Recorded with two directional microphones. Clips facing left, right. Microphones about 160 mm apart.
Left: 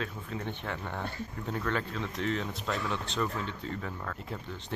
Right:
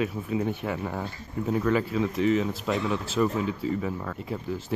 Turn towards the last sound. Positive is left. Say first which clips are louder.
# right 9 dB
turn(degrees=-10)  # may be behind; listen again after turning